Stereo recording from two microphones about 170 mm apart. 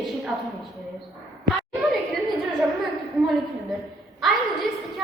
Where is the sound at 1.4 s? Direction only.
Centre (ahead or behind).